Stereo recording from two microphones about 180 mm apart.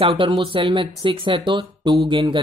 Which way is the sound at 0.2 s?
30° right (ahead or behind).